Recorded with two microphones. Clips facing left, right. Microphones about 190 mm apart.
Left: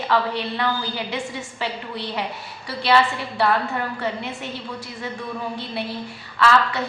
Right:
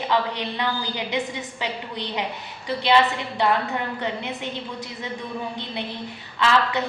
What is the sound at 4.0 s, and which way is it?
Speech, 20° right (ahead or behind).